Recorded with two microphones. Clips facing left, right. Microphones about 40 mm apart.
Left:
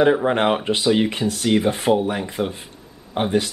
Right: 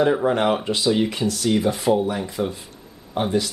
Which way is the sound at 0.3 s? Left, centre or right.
Left.